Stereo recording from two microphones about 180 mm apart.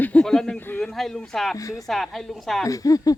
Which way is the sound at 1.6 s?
20° left (ahead or behind).